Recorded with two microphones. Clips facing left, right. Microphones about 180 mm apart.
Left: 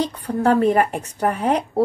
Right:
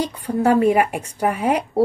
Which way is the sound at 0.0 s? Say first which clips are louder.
Even; 10° right (ahead or behind).